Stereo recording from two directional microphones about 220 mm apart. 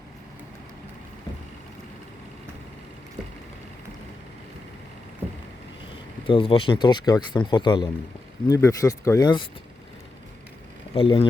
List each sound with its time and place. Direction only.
6.2 s speech: 25° left (ahead or behind)
10.9 s speech: 25° left (ahead or behind)